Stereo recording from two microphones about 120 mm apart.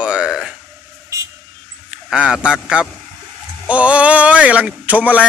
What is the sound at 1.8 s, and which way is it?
A man's voice, 10° right (ahead or behind).